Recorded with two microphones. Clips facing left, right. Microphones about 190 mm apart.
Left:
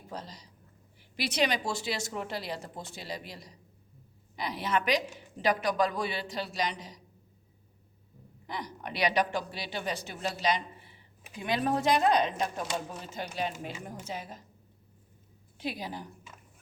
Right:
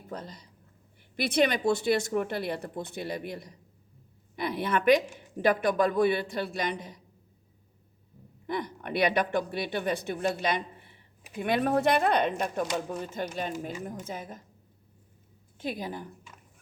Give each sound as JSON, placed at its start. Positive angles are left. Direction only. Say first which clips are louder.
{"t": 0.1, "sound": "a woman's voice", "louder": "right 2 dB", "side_deg": -55}
{"t": 8.4, "sound": "speech", "louder": "right 6 dB", "side_deg": -55}
{"t": 15.5, "sound": "a woman's voice", "louder": "right 2 dB", "side_deg": -50}